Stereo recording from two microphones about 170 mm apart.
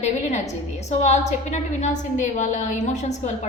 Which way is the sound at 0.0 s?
40° left (ahead or behind).